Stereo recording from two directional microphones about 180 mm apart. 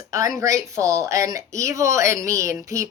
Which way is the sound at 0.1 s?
20° right (ahead or behind).